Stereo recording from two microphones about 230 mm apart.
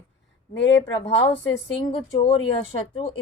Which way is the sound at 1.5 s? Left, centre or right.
Left.